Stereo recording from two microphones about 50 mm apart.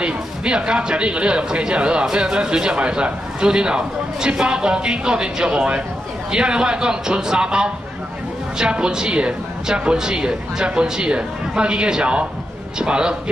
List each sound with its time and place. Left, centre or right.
0.0 s a man's voice: centre